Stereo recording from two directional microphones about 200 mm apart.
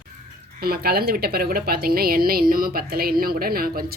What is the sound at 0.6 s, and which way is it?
A woman's voice, 50° right (ahead or behind).